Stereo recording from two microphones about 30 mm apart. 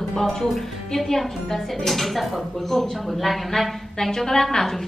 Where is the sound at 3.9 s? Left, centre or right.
Centre.